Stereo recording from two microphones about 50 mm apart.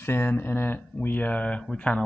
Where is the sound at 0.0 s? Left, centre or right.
Left.